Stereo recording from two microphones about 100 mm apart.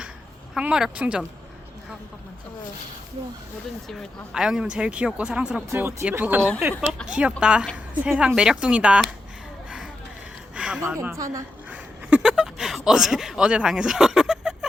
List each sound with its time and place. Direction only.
0.5 s speech: 5° right (ahead or behind)
3.8 s speech: centre (ahead or behind)
5.7 s a woman's voice: 25° right (ahead or behind)
9.6 s a sound: 5° right (ahead or behind)
10.8 s a woman's voice: 25° right (ahead or behind)
11.7 s a sound: 10° right (ahead or behind)